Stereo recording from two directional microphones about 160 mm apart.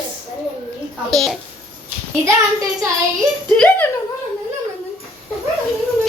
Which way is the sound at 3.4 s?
5° left (ahead or behind).